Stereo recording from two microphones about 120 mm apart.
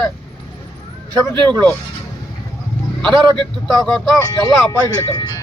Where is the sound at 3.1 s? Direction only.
40° right (ahead or behind).